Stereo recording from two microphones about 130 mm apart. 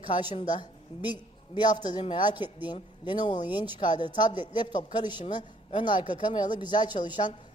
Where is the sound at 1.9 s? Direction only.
35° left (ahead or behind).